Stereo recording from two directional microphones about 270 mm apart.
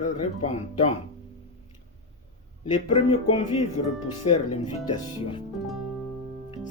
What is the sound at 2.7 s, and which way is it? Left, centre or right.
Speech, left.